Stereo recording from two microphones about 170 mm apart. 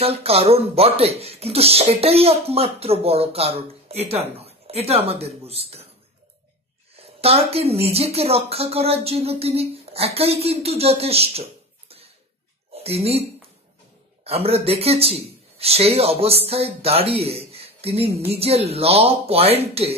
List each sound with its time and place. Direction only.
0.0 s speech: 35° right (ahead or behind)
7.0 s speech: 35° right (ahead or behind)
12.7 s speech: 35° right (ahead or behind)
14.2 s speech: 35° right (ahead or behind)